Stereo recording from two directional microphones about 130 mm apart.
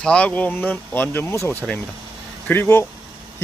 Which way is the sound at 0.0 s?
10° left (ahead or behind).